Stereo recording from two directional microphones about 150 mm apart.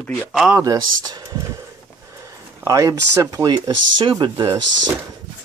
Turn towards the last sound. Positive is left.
turn(degrees=-25)  # may be behind; listen again after turning